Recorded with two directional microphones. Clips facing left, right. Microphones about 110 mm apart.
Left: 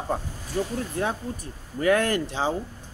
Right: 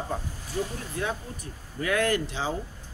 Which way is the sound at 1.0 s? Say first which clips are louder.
Left 2 dB; 40° left (ahead or behind).